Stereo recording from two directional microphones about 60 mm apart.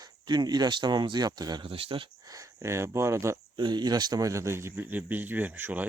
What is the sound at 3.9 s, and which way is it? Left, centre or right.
Speech, right.